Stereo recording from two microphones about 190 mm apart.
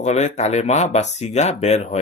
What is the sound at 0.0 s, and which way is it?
Speech, 35° left (ahead or behind).